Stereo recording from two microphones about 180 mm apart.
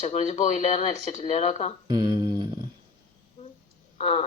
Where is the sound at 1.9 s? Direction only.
25° right (ahead or behind).